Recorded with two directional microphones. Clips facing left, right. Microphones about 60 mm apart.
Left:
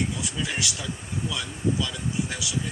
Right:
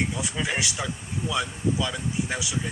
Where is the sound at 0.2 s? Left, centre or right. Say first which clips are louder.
Right 2 dB; right.